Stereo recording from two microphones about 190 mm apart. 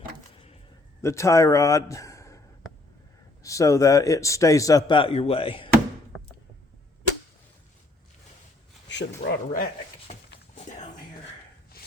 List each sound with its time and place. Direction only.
1.0 s a man's voice: 15° left (ahead or behind)
3.4 s a man's voice: 15° left (ahead or behind)
4.9 s speech: 25° left (ahead or behind)
8.9 s speech: 60° left (ahead or behind)
10.1 s a sound: 35° left (ahead or behind)